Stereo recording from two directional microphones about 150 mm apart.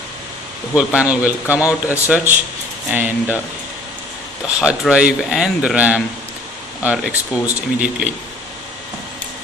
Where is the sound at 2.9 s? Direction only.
10° right (ahead or behind).